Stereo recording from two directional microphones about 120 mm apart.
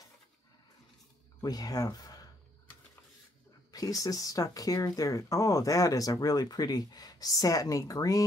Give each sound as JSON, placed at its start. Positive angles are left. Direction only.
{"t": 1.4, "sound": "speech", "side_deg": 35}
{"t": 3.7, "sound": "speech", "side_deg": 30}